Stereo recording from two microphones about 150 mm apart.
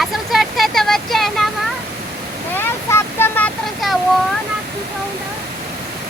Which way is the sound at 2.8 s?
15° left (ahead or behind).